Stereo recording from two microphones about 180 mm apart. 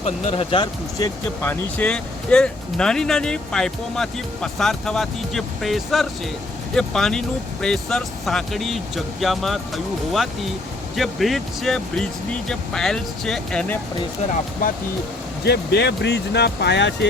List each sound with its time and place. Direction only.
0.0 s speech: 30° left (ahead or behind); by 13.7 s 5° left (ahead or behind)
14.6 s speech: 50° left (ahead or behind)
15.4 s speech: 65° left (ahead or behind)